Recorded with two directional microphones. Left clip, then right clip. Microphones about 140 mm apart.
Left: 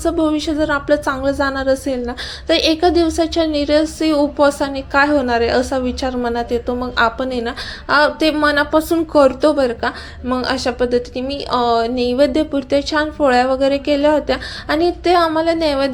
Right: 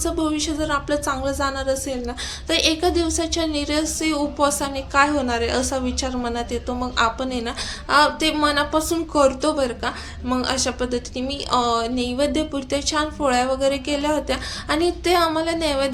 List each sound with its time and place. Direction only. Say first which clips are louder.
0.0 s a woman's voice: left 6 dB; 35° left (ahead or behind)